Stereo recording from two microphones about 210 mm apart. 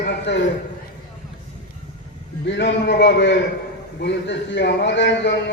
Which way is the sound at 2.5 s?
55° left (ahead or behind).